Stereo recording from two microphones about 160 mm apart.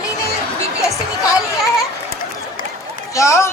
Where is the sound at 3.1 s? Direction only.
20° left (ahead or behind).